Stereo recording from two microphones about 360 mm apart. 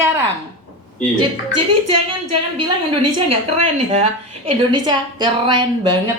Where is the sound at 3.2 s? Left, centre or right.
Centre.